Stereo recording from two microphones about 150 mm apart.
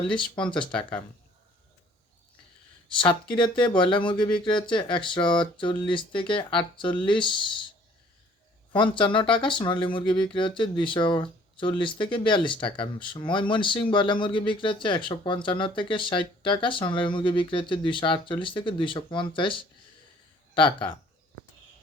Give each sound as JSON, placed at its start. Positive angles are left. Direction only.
{"t": 0.5, "sound": "speech", "side_deg": 5}
{"t": 2.9, "sound": "speech", "side_deg": 35}
{"t": 8.7, "sound": "speech", "side_deg": 35}